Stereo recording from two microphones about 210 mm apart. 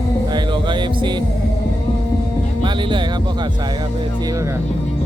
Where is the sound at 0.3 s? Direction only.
20° right (ahead or behind).